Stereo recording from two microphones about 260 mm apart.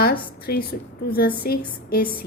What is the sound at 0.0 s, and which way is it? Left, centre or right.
A woman's voice, left.